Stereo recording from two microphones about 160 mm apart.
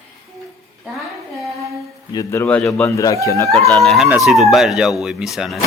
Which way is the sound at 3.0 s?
20° left (ahead or behind).